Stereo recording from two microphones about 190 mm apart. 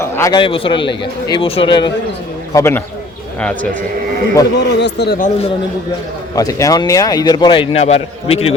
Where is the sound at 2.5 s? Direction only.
15° left (ahead or behind).